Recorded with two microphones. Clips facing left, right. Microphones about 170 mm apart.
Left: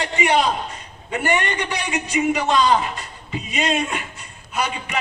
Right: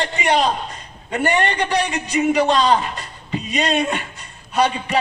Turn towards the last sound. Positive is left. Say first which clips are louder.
# right 6 dB
turn(degrees=-35)  # may be behind; listen again after turning